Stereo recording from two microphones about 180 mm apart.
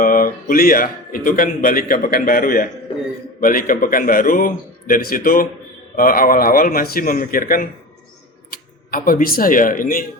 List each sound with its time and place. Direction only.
0.0 s speech: 50° left (ahead or behind)